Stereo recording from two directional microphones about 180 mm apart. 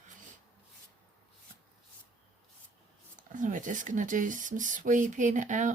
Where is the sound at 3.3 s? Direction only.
45° right (ahead or behind).